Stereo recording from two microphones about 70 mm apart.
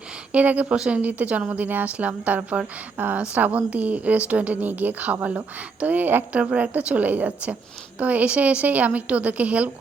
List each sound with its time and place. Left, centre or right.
0.3 s speech: centre